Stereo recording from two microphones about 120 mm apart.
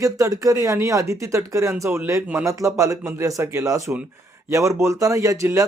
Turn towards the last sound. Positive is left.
turn(degrees=-25)  # may be behind; listen again after turning